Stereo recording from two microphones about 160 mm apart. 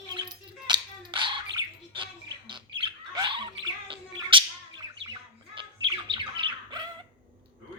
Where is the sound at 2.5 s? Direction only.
30° right (ahead or behind).